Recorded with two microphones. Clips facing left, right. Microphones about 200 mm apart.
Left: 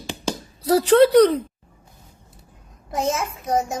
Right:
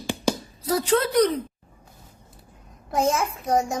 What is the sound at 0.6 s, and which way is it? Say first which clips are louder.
Speech: left 8 dB; 35° left (ahead or behind).